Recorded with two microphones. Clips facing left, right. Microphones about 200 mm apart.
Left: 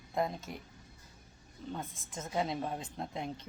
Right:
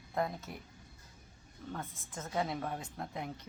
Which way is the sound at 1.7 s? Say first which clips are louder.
Left 1 dB; 25° left (ahead or behind).